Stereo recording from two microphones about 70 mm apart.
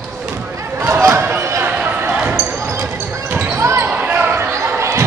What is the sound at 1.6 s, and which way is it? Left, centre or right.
Run, centre.